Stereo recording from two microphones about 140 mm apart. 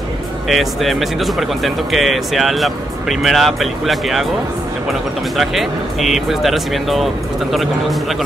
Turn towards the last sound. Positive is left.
turn(degrees=0)  # may be behind; listen again after turning